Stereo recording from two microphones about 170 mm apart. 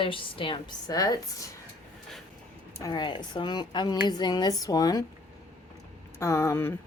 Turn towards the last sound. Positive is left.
turn(degrees=15)  # may be behind; listen again after turning